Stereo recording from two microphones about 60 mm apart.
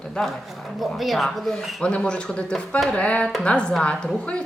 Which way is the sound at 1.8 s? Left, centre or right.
Centre.